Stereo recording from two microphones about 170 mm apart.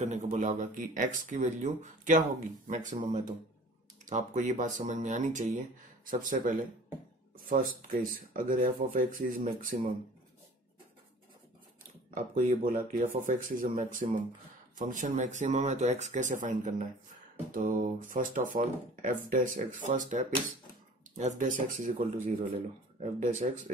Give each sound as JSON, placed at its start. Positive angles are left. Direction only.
{"t": 0.0, "sound": "speech", "side_deg": -45}
{"t": 12.1, "sound": "speech", "side_deg": -50}